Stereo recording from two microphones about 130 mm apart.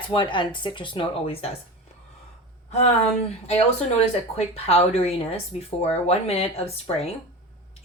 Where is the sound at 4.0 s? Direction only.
50° left (ahead or behind).